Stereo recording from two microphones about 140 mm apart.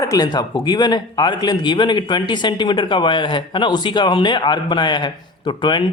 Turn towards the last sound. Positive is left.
turn(degrees=35)  # may be behind; listen again after turning